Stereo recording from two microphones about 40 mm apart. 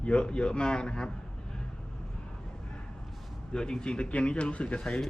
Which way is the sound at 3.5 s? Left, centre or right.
Left.